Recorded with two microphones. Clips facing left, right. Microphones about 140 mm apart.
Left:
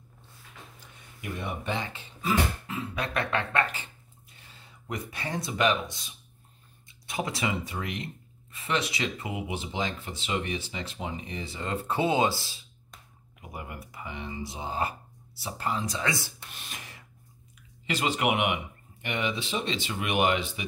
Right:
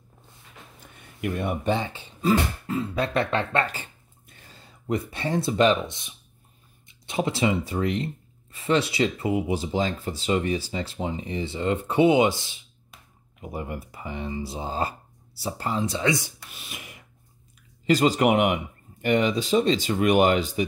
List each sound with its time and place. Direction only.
1.2 s speech: 65° right (ahead or behind)
1.7 s speech: 35° right (ahead or behind)
4.3 s speech: 45° right (ahead or behind); by 16.3 s 20° right (ahead or behind)
16.4 s a sound: 5° right (ahead or behind)
17.8 s speech: 35° right (ahead or behind)